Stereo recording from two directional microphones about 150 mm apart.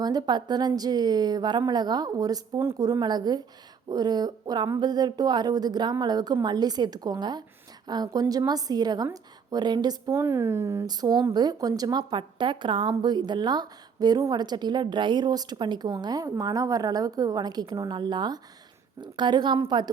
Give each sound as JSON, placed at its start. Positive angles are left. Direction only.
{"t": 0.0, "sound": "a woman's voice", "side_deg": -25}